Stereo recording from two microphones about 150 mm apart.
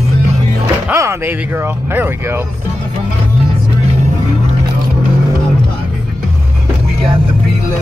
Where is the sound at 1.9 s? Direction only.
15° right (ahead or behind).